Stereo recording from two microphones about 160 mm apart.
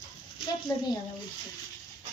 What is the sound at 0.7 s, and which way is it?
Speech, 20° left (ahead or behind).